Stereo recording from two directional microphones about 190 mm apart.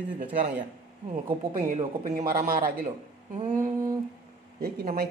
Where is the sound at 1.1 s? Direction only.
45° right (ahead or behind).